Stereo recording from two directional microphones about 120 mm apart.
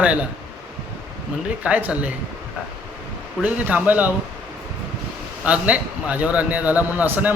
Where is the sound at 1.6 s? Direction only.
10° right (ahead or behind).